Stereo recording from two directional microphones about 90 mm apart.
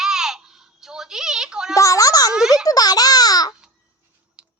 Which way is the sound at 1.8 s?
40° left (ahead or behind).